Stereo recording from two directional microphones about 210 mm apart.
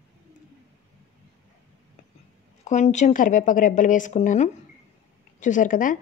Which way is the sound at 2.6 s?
35° left (ahead or behind).